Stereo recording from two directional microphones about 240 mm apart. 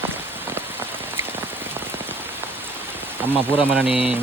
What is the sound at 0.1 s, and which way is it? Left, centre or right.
Rain on surface, centre.